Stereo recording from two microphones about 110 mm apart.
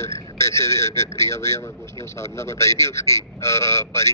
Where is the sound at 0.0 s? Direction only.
25° left (ahead or behind).